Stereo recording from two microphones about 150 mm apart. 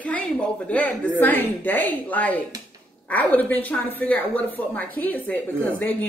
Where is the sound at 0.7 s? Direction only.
10° left (ahead or behind).